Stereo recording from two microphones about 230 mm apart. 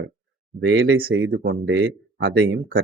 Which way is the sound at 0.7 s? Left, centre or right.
Right.